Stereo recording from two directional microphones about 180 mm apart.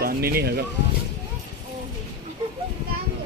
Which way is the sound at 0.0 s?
55° right (ahead or behind).